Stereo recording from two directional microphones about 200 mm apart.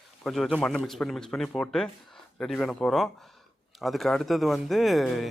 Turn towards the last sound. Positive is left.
turn(degrees=0)  # may be behind; listen again after turning